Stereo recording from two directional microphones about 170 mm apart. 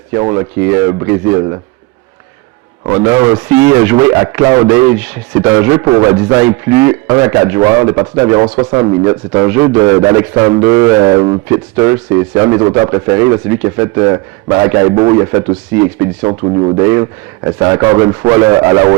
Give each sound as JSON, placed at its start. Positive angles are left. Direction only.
{"t": 0.1, "sound": "speech", "side_deg": -20}
{"t": 2.8, "sound": "a man's voice", "side_deg": -15}